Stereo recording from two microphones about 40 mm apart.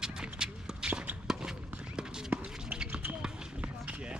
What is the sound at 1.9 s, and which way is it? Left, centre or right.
Run, centre.